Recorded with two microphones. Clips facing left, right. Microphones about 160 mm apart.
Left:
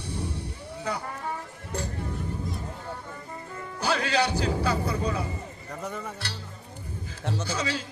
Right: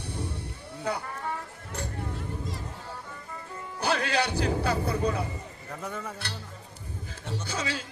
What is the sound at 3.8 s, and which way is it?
Music, 55° right (ahead or behind).